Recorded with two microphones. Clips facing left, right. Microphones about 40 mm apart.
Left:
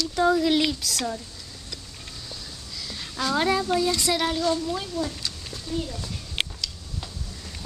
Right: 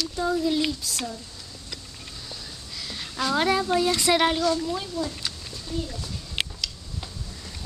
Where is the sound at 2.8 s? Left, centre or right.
Centre.